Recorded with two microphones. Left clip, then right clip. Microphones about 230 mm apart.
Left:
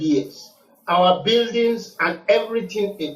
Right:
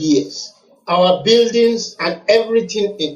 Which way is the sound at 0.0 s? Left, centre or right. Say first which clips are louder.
Right 5 dB; right.